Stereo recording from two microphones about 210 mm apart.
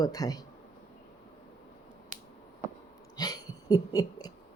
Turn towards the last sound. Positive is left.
turn(degrees=20)  # may be behind; listen again after turning